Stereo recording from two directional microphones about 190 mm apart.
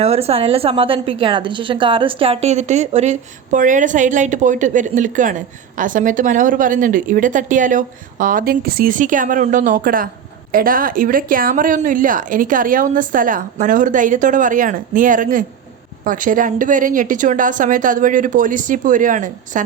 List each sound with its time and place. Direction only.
0.0 s a woman's voice: 30° right (ahead or behind)